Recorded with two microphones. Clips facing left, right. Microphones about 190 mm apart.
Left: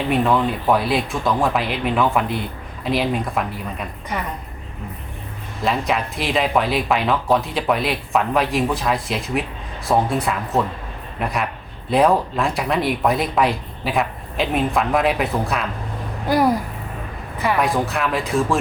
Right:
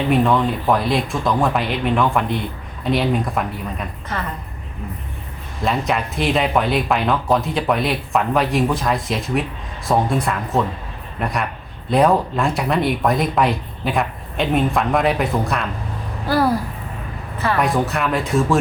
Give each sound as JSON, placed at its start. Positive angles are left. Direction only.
{"t": 0.1, "sound": "speech", "side_deg": 0}
{"t": 4.1, "sound": "speech", "side_deg": 15}
{"t": 5.6, "sound": "speech", "side_deg": 0}
{"t": 16.2, "sound": "a woman's voice", "side_deg": 15}
{"t": 17.6, "sound": "speech", "side_deg": 0}